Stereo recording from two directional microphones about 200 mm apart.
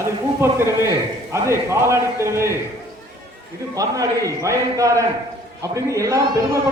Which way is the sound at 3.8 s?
15° right (ahead or behind).